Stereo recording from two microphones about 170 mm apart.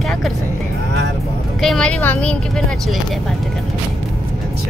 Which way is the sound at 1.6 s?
5° left (ahead or behind).